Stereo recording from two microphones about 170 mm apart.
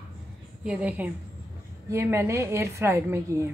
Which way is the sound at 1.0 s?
10° right (ahead or behind).